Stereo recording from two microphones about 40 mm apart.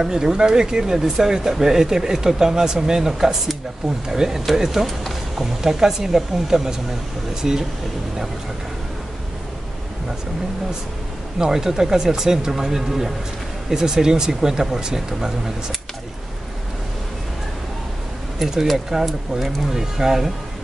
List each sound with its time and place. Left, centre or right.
0.0 s speech: centre
5.4 s speech: centre
11.3 s speech: centre
18.4 s speech: centre